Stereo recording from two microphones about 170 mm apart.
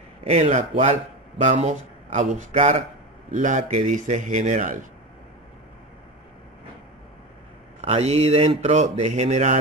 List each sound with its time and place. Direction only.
0.2 s speech: 40° right (ahead or behind)
7.8 s speech: 40° right (ahead or behind)